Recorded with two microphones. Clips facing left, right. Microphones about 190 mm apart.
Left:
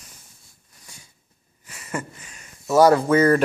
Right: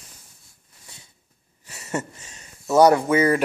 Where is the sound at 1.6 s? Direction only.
25° right (ahead or behind).